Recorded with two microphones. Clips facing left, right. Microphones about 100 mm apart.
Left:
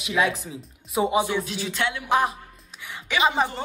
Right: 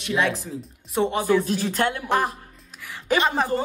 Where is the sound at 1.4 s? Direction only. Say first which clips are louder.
Right 5 dB; 40° right (ahead or behind).